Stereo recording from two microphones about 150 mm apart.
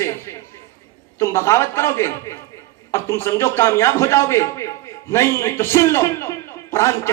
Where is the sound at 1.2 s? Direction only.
15° left (ahead or behind).